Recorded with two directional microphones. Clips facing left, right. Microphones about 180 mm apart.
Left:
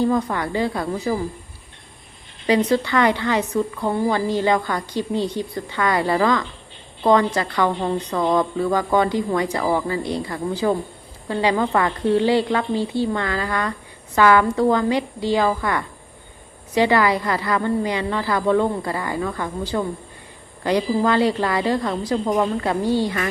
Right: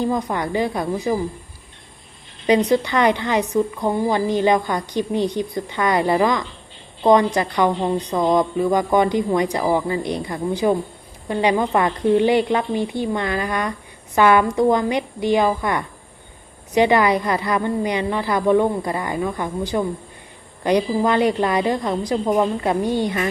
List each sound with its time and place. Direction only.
0.0 s a woman's voice: 15° right (ahead or behind)
2.5 s a woman's voice: 15° right (ahead or behind)